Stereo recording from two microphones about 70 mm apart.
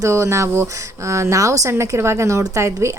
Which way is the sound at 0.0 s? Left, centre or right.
Right.